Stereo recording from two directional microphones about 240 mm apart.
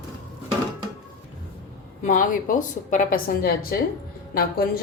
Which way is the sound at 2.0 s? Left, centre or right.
Left.